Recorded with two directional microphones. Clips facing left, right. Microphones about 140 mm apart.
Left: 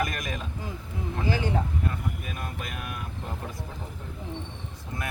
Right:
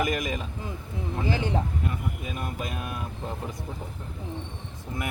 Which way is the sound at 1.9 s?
20° right (ahead or behind).